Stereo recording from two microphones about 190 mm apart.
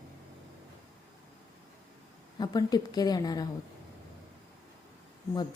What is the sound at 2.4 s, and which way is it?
A woman's voice, 20° left (ahead or behind).